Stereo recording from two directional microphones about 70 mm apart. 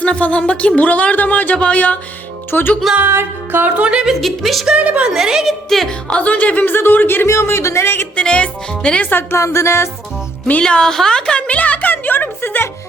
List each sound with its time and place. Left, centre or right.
0.0 s speech: centre
2.5 s speech: left
3.1 s music: right
3.8 s a woman's voice: centre
4.1 s a woman's voice: centre
4.6 s a woman's voice: centre
5.0 s a woman's voice: centre
6.1 s speech: centre; by 8.0 s left
8.1 s speech: centre
9.0 s speech: left
9.4 s music: left
10.6 s a woman's voice: centre; by 12.6 s left